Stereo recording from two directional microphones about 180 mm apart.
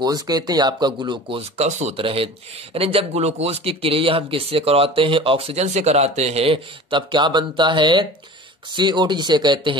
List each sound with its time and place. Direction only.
0.0 s speech: 20° right (ahead or behind)
1.6 s speech: 40° right (ahead or behind)